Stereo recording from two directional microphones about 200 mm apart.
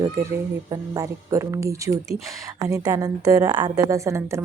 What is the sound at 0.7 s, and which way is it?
A woman's voice, 15° right (ahead or behind).